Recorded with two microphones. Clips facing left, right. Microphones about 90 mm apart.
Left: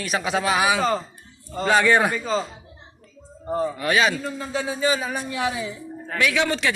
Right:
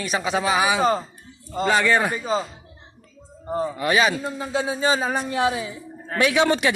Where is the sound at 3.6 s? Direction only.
5° right (ahead or behind).